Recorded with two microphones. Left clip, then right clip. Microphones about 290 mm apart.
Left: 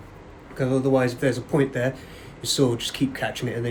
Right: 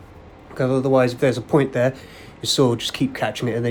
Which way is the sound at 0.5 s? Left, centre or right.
Centre.